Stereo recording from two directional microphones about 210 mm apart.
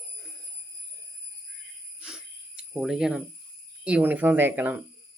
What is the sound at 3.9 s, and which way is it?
Speech, 5° right (ahead or behind).